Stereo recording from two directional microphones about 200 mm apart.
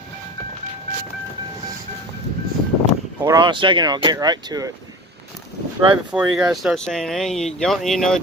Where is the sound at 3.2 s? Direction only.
20° right (ahead or behind).